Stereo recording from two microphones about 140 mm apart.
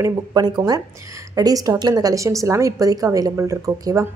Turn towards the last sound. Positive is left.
turn(degrees=-25)  # may be behind; listen again after turning